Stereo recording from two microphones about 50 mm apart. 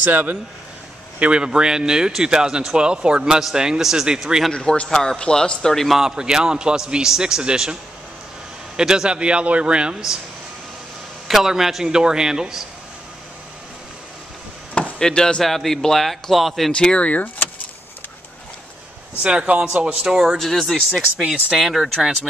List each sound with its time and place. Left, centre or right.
0.0 s speech: right
1.2 s speech: centre
4.5 s a man's voice: centre
5.9 s speech: centre
8.7 s a man's voice: centre
11.2 s speech: centre
14.7 s chop: left
15.0 s a man's voice: centre
16.7 s speech: centre
17.1 s speech: left
19.2 s a man's voice: right
20.3 s a man's voice: centre
20.9 s speech: centre